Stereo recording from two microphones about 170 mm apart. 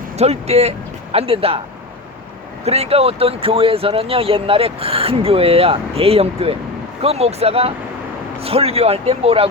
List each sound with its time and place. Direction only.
0.2 s speech: 40° right (ahead or behind)
2.6 s speech: 40° right (ahead or behind)